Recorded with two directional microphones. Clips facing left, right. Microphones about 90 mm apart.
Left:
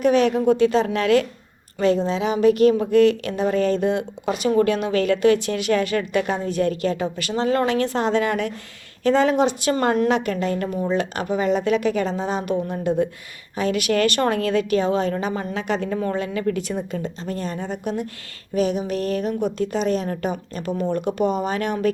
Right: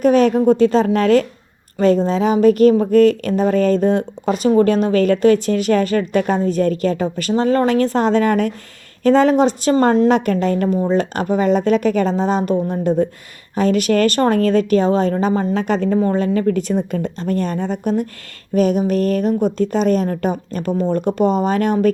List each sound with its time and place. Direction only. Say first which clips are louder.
0.0 s a woman's voice: right 4 dB; 40° right (ahead or behind)